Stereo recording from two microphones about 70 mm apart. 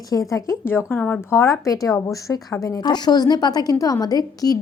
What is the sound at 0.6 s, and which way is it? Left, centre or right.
Speech, left.